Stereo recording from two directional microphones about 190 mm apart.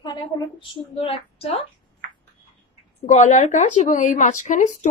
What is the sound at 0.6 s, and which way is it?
Speech, 30° left (ahead or behind).